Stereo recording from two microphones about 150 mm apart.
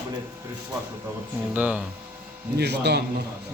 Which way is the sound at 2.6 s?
90° right.